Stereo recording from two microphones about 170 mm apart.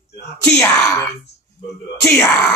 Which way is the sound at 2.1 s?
5° left (ahead or behind).